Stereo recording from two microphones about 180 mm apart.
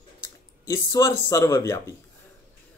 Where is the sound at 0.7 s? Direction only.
20° left (ahead or behind).